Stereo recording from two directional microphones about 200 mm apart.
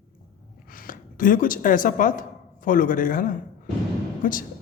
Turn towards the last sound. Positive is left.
turn(degrees=45)  # may be behind; listen again after turning